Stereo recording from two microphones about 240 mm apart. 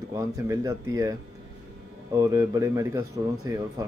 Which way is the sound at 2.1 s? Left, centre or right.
Centre.